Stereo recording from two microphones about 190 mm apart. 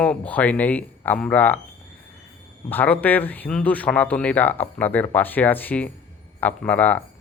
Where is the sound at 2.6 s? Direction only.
10° left (ahead or behind).